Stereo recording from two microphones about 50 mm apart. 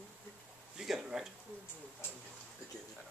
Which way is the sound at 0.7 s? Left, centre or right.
Centre.